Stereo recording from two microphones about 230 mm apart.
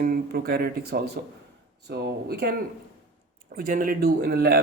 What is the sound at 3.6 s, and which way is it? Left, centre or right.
Speech, right.